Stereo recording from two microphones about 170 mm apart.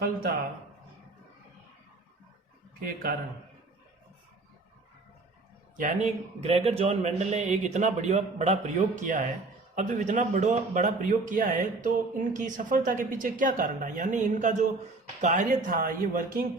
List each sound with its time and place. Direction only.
0.0 s speech: 60° right (ahead or behind)
2.8 s speech: 60° right (ahead or behind)
5.8 s a man's voice: 45° right (ahead or behind)